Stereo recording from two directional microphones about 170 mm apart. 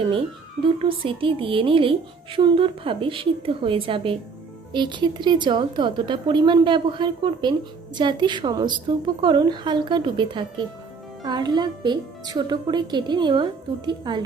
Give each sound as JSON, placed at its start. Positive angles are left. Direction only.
{"t": 0.6, "sound": "speech", "side_deg": -30}